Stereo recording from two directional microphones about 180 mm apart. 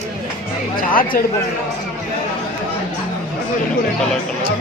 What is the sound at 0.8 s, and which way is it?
Speech, 50° left (ahead or behind).